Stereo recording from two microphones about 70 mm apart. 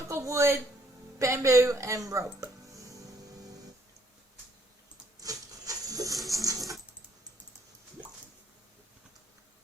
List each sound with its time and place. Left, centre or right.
0.1 s speech: right
5.2 s wood: right
6.1 s coin: centre